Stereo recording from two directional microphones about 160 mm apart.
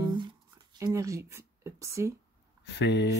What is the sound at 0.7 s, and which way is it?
Speech, 20° right (ahead or behind).